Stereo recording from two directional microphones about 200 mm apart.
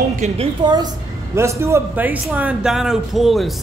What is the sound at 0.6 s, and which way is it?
A woman's voice, 20° right (ahead or behind).